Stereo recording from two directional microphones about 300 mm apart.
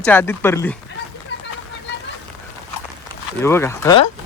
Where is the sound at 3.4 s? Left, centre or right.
Centre.